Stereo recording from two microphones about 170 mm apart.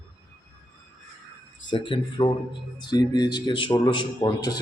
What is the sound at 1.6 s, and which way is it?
Speech, 30° left (ahead or behind).